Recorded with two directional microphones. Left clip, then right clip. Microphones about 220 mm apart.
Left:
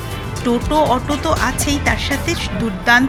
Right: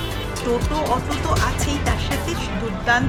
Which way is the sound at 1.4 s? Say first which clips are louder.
Left 5 dB; 20° left (ahead or behind).